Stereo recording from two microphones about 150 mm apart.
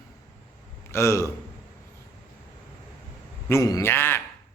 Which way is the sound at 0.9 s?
20° left (ahead or behind).